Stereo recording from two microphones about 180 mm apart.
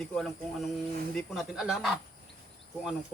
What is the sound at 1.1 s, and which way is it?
Speech, centre (ahead or behind).